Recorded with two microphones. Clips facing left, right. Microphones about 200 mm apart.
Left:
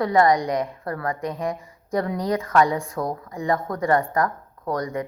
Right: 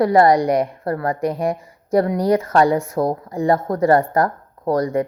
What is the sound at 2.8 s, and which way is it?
Speech, 30° right (ahead or behind).